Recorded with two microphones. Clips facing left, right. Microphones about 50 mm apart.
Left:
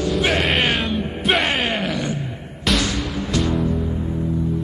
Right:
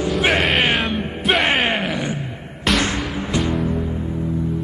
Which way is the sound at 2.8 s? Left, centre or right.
Right.